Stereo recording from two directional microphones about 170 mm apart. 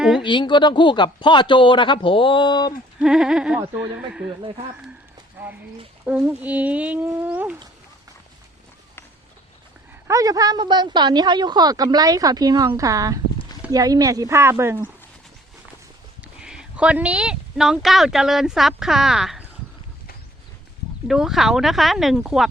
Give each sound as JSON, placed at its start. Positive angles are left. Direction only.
{"t": 0.2, "sound": "speech", "side_deg": 30}
{"t": 3.0, "sound": "speech", "side_deg": -5}
{"t": 6.1, "sound": "speech", "side_deg": -10}
{"t": 10.1, "sound": "a woman's voice", "side_deg": -20}
{"t": 16.2, "sound": "speech", "side_deg": -5}
{"t": 21.1, "sound": "speech", "side_deg": 0}